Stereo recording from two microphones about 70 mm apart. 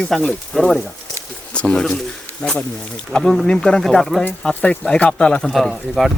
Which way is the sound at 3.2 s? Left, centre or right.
Centre.